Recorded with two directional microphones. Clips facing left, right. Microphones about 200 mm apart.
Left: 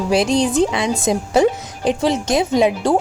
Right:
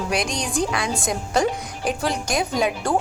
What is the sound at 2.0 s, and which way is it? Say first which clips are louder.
Speech: left 7 dB; 25° left (ahead or behind).